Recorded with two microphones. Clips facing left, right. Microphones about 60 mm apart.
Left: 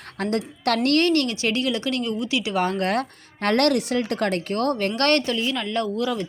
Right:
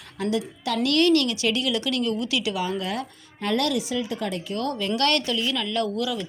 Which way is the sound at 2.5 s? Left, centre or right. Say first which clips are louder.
Left 5 dB; left.